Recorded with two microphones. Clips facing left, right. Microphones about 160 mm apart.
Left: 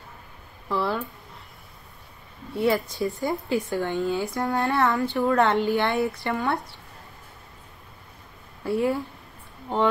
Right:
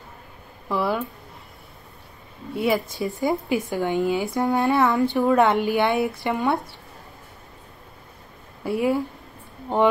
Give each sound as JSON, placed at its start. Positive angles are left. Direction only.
{"t": 0.7, "sound": "a sound", "side_deg": -10}
{"t": 2.5, "sound": "speech", "side_deg": -15}
{"t": 8.6, "sound": "speech", "side_deg": -15}